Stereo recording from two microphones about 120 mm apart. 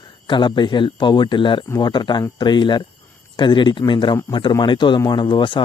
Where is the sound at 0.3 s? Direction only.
40° left (ahead or behind).